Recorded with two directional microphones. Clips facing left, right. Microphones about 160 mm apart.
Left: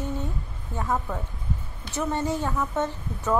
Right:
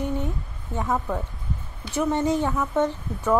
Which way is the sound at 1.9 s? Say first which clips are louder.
Right 4 dB; 15° right (ahead or behind).